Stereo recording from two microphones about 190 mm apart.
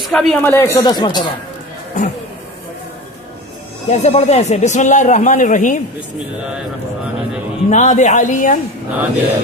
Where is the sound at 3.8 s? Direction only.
35° left (ahead or behind).